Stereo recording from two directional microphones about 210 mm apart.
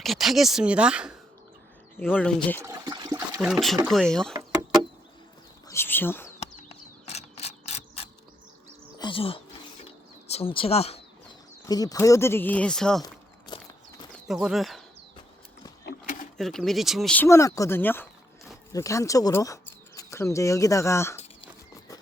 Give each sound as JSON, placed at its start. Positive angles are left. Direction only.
{"t": 0.0, "sound": "speech", "side_deg": 0}
{"t": 2.0, "sound": "speech", "side_deg": 10}
{"t": 2.6, "sound": "speech", "side_deg": -15}
{"t": 3.4, "sound": "speech", "side_deg": 0}
{"t": 5.6, "sound": "speech", "side_deg": 10}
{"t": 6.4, "sound": "insect", "side_deg": 30}
{"t": 9.0, "sound": "speech", "side_deg": 25}
{"t": 11.6, "sound": "speech", "side_deg": 15}
{"t": 14.4, "sound": "speech", "side_deg": 0}
{"t": 15.9, "sound": "a sound", "side_deg": 40}
{"t": 16.4, "sound": "speech", "side_deg": 0}